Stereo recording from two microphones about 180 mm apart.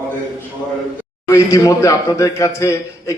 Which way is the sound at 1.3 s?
15° left (ahead or behind).